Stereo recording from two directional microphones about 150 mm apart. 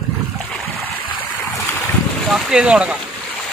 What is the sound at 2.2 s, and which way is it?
Speech, 5° right (ahead or behind).